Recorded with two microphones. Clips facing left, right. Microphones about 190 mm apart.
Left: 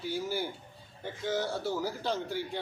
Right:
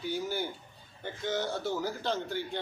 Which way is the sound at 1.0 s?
5° left (ahead or behind).